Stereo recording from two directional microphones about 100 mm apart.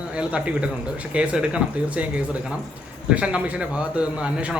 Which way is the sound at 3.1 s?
10° right (ahead or behind).